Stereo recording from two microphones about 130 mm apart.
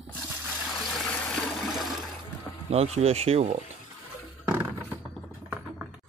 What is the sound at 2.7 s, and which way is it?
Speech, 55° right (ahead or behind).